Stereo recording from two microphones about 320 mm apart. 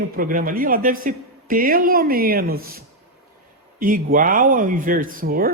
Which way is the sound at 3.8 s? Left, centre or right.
Right.